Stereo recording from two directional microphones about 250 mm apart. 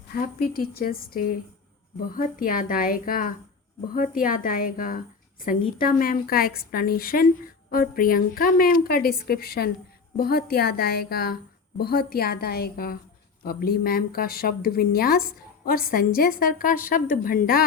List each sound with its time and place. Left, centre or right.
0.1 s a woman's voice: left